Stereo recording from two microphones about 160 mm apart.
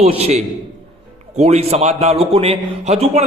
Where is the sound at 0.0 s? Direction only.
40° right (ahead or behind).